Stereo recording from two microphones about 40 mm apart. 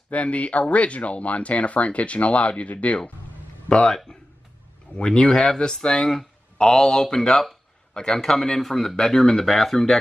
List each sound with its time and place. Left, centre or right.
0.1 s speech: left
3.6 s a man's voice: left
4.9 s speech: left; by 9.9 s centre